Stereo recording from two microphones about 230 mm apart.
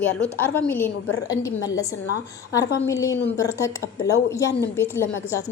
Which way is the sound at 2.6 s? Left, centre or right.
Left.